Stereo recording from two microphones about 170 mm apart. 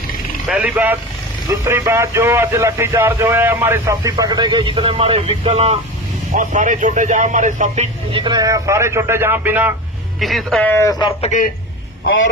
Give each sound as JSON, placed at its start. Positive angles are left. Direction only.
{"t": 0.4, "sound": "speech", "side_deg": -5}
{"t": 6.3, "sound": "speech", "side_deg": -45}
{"t": 8.1, "sound": "speech", "side_deg": -25}
{"t": 10.2, "sound": "speech", "side_deg": 0}
{"t": 11.2, "sound": "a man's voice", "side_deg": 50}
{"t": 12.0, "sound": "speech", "side_deg": 90}